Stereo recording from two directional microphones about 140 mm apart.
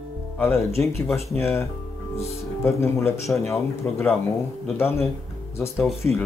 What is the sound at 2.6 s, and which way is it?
Speech, 20° left (ahead or behind).